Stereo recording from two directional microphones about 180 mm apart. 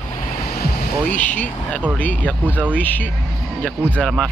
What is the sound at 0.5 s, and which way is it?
Vehicle, 60° left (ahead or behind).